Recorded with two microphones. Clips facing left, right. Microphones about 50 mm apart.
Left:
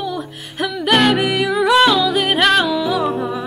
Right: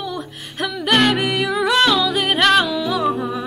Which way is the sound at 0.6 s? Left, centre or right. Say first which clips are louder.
Left 2 dB; centre.